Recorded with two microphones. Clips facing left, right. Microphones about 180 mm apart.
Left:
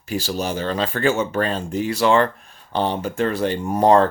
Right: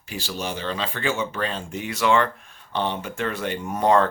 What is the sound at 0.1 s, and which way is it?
Speech, 40° left (ahead or behind).